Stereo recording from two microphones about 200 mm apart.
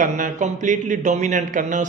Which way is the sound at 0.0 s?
40° right (ahead or behind).